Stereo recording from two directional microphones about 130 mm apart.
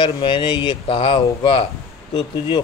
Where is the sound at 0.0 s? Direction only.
35° left (ahead or behind).